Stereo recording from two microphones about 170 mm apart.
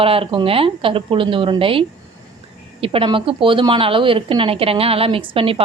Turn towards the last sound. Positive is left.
turn(degrees=-30)  # may be behind; listen again after turning